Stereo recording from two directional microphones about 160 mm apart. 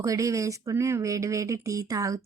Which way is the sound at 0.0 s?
20° right (ahead or behind).